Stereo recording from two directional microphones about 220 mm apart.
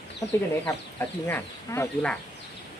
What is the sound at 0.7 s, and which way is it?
Speech, 10° left (ahead or behind).